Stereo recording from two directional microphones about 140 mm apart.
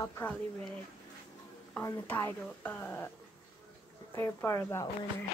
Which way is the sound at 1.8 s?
20° left (ahead or behind).